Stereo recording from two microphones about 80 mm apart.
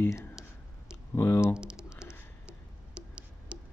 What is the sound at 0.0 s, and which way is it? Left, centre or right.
Speech, left.